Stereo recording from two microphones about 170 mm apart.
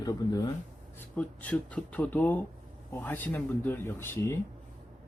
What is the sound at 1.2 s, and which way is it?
A man's voice, 10° left (ahead or behind).